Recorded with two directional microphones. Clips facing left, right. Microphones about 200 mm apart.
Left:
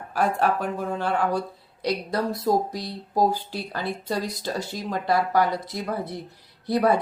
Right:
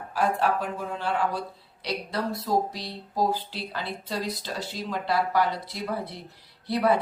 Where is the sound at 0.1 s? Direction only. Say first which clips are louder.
Left 2 dB; 50° left (ahead or behind).